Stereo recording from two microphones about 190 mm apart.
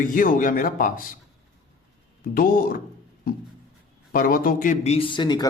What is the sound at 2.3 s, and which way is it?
Speech, 50° left (ahead or behind).